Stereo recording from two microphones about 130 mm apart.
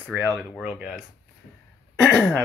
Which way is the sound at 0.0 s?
15° right (ahead or behind).